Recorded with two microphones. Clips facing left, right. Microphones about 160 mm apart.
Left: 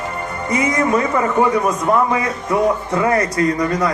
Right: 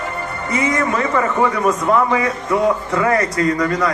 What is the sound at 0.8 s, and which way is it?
A man's voice, 25° left (ahead or behind).